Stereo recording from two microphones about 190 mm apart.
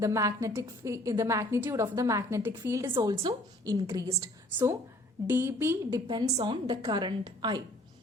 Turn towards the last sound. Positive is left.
turn(degrees=-20)  # may be behind; listen again after turning